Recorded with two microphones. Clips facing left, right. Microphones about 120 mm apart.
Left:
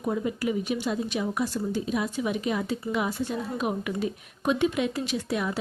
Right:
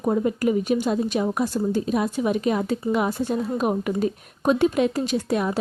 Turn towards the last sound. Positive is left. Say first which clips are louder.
# right 5 dB
turn(degrees=-40)  # may be behind; listen again after turning